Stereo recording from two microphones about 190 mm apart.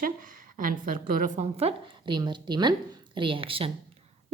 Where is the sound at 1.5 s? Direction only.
30° right (ahead or behind).